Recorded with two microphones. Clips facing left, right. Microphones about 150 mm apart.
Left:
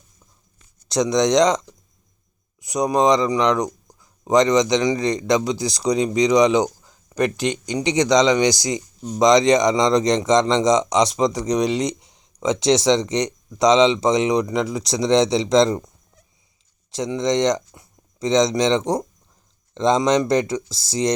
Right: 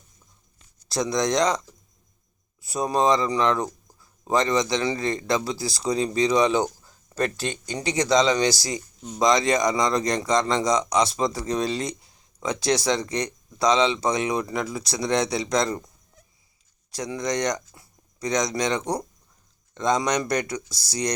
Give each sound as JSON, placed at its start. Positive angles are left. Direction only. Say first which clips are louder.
{"t": 0.9, "sound": "a man's voice", "louder": "left 6 dB", "side_deg": 20}
{"t": 16.9, "sound": "a man's voice", "louder": "left 6 dB", "side_deg": 20}